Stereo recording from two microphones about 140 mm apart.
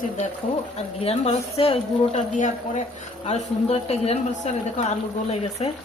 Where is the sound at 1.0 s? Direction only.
45° left (ahead or behind).